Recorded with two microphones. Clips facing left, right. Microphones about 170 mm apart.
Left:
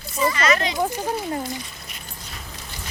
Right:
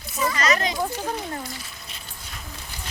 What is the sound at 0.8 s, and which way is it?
Speech, 10° left (ahead or behind).